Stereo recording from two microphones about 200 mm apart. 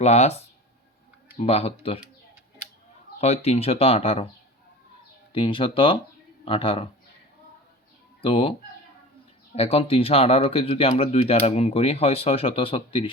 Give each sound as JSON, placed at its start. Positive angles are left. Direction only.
{"t": 0.0, "sound": "speech", "side_deg": 35}
{"t": 3.2, "sound": "speech", "side_deg": 30}
{"t": 5.3, "sound": "speech", "side_deg": 25}
{"t": 8.2, "sound": "speech", "side_deg": 25}
{"t": 9.6, "sound": "speech", "side_deg": 30}